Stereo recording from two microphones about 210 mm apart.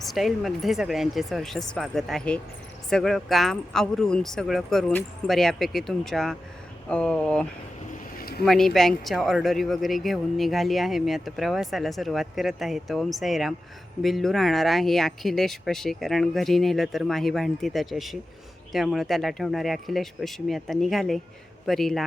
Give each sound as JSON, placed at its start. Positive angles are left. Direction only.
{"t": 0.0, "sound": "speech", "side_deg": 0}
{"t": 8.2, "sound": "a sound", "side_deg": 45}
{"t": 8.4, "sound": "speech", "side_deg": 0}